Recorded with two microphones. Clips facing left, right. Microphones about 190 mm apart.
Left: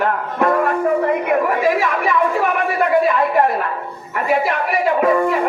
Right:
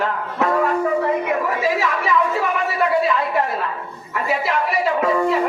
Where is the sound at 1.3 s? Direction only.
55° left (ahead or behind).